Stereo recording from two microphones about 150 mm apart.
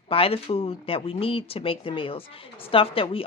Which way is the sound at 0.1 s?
40° left (ahead or behind).